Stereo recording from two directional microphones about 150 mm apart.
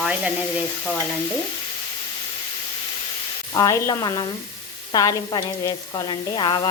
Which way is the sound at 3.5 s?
20° left (ahead or behind).